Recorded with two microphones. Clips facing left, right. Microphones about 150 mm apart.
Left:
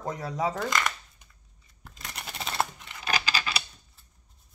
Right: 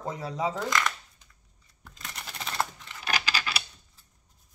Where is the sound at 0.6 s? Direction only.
5° left (ahead or behind).